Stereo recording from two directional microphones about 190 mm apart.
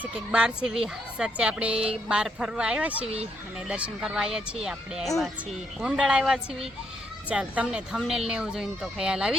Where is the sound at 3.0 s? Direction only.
30° right (ahead or behind).